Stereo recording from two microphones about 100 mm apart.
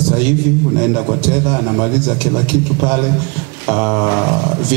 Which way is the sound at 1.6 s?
25° right (ahead or behind).